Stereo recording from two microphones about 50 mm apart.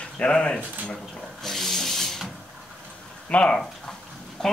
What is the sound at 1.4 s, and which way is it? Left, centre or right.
Rub, centre.